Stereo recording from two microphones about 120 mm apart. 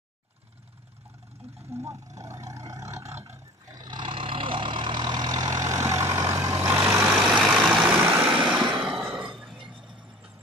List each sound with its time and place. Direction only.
1.7 s vehicle: 25° right (ahead or behind)
3.7 s vehicle: 35° right (ahead or behind)
7.2 s vehicle: centre (ahead or behind)
8.8 s a sound: 5° right (ahead or behind)